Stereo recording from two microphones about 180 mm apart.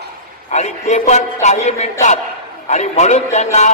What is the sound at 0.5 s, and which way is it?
A man's voice, 40° left (ahead or behind).